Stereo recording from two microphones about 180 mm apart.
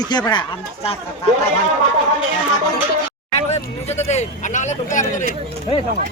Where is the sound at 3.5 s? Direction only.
40° left (ahead or behind).